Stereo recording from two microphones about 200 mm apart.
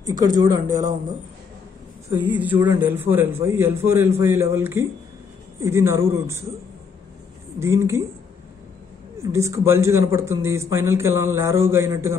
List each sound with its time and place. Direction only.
0.0 s speech: 20° right (ahead or behind)
2.2 s a man's voice: 10° right (ahead or behind)
7.6 s a man's voice: 15° right (ahead or behind)
9.2 s a man's voice: 15° right (ahead or behind)